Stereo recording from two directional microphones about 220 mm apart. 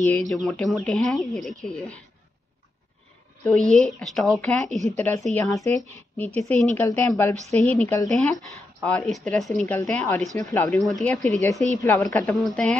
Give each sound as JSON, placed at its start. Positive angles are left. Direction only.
{"t": 0.0, "sound": "speech", "side_deg": 5}
{"t": 3.4, "sound": "speech", "side_deg": 5}
{"t": 11.1, "sound": "speech", "side_deg": -35}
{"t": 11.8, "sound": "speech", "side_deg": 10}